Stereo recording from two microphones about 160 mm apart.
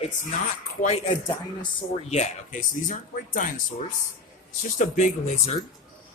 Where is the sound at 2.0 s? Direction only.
45° left (ahead or behind).